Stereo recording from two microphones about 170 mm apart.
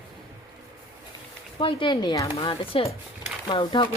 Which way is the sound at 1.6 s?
30° left (ahead or behind).